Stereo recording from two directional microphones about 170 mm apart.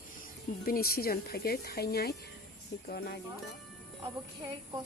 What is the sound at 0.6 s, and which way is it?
Speech, 60° left (ahead or behind).